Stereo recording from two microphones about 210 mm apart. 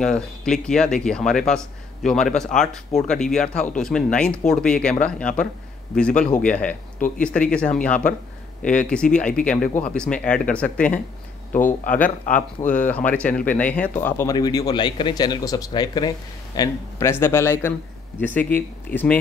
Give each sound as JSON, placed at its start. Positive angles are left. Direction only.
{"t": 0.0, "sound": "speech", "side_deg": 5}
{"t": 11.5, "sound": "speech", "side_deg": 40}
{"t": 11.9, "sound": "speech", "side_deg": 5}